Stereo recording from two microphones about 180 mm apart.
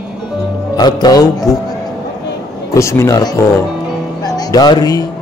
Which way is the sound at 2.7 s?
15° left (ahead or behind).